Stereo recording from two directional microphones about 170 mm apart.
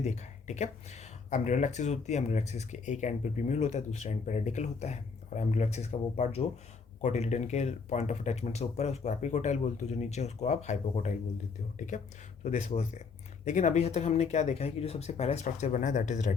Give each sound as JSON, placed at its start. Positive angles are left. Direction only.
{"t": 0.0, "sound": "speech", "side_deg": 40}